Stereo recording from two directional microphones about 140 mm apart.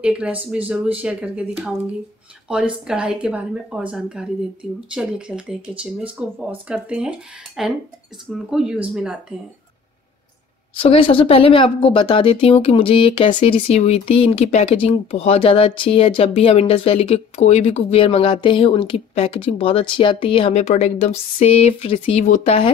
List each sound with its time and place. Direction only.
0.0 s speech: 10° right (ahead or behind)
2.9 s speech: 5° right (ahead or behind)
10.7 s speech: 40° left (ahead or behind)